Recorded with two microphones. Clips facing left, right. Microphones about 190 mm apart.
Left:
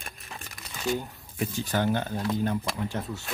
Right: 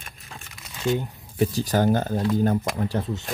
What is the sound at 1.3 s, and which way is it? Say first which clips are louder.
Speech: right 6 dB; 35° right (ahead or behind).